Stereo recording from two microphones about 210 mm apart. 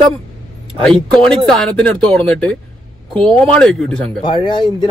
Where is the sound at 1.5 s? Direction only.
5° left (ahead or behind).